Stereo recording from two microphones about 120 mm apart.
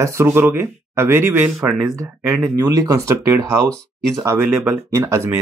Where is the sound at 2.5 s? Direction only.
25° right (ahead or behind).